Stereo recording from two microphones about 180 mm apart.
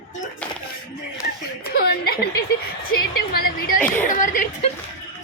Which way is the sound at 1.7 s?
55° left (ahead or behind).